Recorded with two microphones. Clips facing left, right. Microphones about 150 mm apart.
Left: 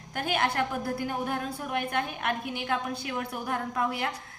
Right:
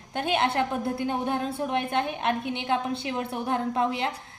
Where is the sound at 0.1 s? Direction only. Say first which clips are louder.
Right 3 dB; 25° right (ahead or behind).